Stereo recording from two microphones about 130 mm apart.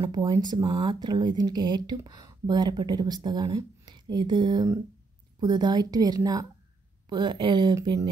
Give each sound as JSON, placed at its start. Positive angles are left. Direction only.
{"t": 0.0, "sound": "speech", "side_deg": -35}